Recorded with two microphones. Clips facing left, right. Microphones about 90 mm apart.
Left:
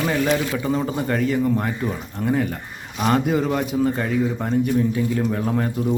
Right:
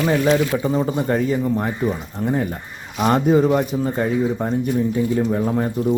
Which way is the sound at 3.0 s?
30° right (ahead or behind).